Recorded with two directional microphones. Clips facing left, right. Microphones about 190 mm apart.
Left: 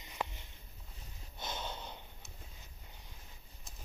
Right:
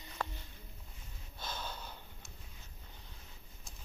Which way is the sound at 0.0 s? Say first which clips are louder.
Left 1 dB; 15° left (ahead or behind).